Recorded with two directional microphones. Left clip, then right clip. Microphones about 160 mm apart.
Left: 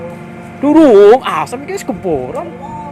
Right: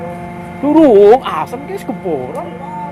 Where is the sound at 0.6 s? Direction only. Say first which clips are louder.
Left 2 dB; 30° left (ahead or behind).